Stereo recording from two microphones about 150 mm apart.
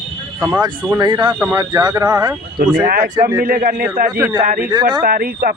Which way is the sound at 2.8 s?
65° right (ahead or behind).